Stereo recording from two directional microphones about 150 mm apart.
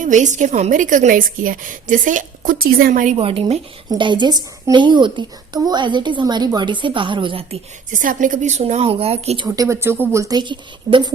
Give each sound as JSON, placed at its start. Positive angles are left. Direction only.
{"t": 0.0, "sound": "a woman's voice", "side_deg": -55}
{"t": 3.2, "sound": "a woman's voice", "side_deg": -40}
{"t": 7.9, "sound": "a woman's voice", "side_deg": -60}
{"t": 9.6, "sound": "a woman's voice", "side_deg": -15}